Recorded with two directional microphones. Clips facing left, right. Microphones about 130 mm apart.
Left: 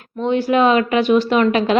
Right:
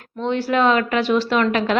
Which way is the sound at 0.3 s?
15° left (ahead or behind).